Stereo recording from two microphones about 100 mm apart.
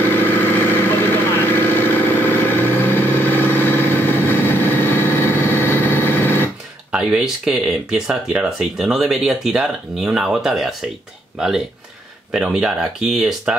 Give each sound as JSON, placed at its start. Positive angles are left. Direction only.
{"t": 0.0, "sound": "vehicle", "side_deg": 20}
{"t": 6.9, "sound": "speech", "side_deg": -5}